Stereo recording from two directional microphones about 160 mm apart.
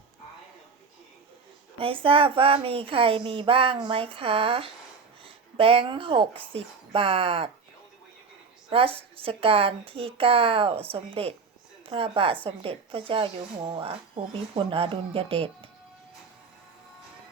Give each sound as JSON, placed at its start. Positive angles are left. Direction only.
{"t": 1.8, "sound": "speech", "side_deg": -35}
{"t": 8.7, "sound": "speech", "side_deg": -35}